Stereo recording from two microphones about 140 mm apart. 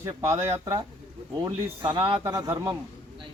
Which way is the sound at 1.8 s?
35° right (ahead or behind).